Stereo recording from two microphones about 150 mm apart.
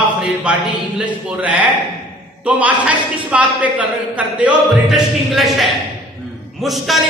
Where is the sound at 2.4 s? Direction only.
10° right (ahead or behind).